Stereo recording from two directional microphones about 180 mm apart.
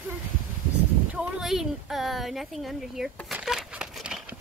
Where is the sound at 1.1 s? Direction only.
Centre (ahead or behind).